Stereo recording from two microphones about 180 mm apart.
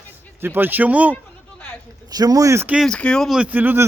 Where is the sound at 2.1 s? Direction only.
20° right (ahead or behind).